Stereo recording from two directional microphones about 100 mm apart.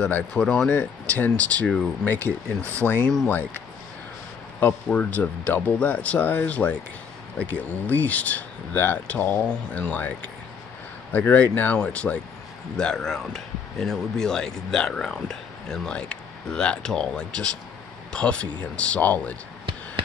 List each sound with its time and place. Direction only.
0.0 s speech: 10° left (ahead or behind)
4.8 s speech: 15° left (ahead or behind)